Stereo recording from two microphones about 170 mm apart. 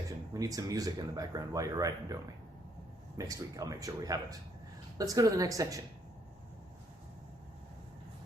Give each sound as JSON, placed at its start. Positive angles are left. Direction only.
{"t": 0.3, "sound": "speech", "side_deg": -20}
{"t": 3.2, "sound": "speech", "side_deg": -20}